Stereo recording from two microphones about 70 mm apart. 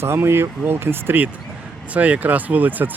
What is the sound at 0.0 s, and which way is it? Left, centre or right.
Speech, right.